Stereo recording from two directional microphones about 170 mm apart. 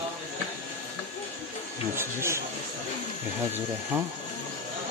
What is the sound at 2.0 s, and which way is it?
Speech, 15° right (ahead or behind).